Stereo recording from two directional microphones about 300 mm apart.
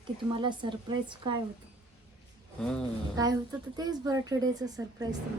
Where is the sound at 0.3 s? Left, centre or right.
Centre.